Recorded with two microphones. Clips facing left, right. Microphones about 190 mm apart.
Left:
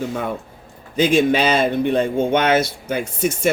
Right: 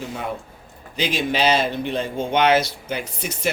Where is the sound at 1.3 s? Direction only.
55° left (ahead or behind).